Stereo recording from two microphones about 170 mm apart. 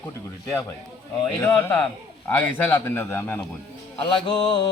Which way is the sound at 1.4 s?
10° left (ahead or behind).